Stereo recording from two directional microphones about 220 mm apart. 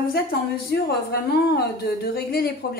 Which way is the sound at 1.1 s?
45° left (ahead or behind).